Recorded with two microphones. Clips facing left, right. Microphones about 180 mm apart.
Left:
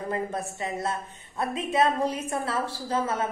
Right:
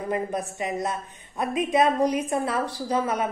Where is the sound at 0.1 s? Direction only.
15° right (ahead or behind).